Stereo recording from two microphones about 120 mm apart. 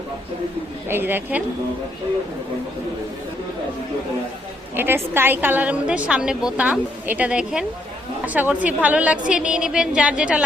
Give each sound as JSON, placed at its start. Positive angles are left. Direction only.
{"t": 0.9, "sound": "a woman's voice", "side_deg": -15}
{"t": 4.8, "sound": "a woman's voice", "side_deg": -20}